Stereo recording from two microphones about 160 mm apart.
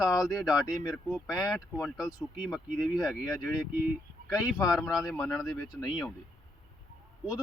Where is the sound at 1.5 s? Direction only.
20° left (ahead or behind).